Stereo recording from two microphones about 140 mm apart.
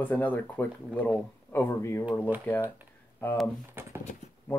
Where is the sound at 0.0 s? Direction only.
10° left (ahead or behind).